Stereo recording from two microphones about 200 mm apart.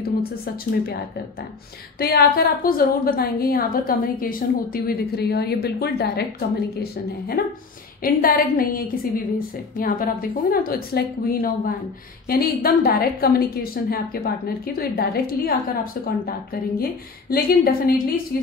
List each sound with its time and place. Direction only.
2.0 s a woman's voice: 50° left (ahead or behind)
7.4 s a woman's voice: 50° left (ahead or behind)